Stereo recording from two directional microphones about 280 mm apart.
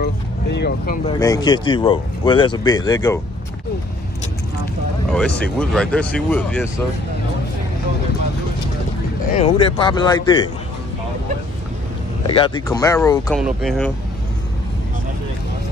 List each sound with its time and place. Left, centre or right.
0.0 s vehicle: left
1.0 s speech: centre
5.1 s speech: centre
9.3 s speech: centre
12.3 s speech: centre
13.4 s speech: centre